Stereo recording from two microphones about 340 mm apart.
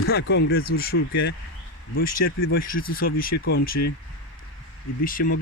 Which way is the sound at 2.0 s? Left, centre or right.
Left.